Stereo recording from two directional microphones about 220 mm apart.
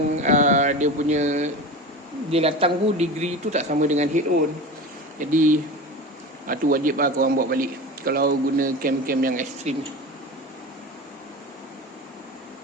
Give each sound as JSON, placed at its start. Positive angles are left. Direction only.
{"t": 0.2, "sound": "a sound", "side_deg": -35}
{"t": 2.3, "sound": "a man's voice", "side_deg": -25}
{"t": 5.3, "sound": "a man's voice", "side_deg": -35}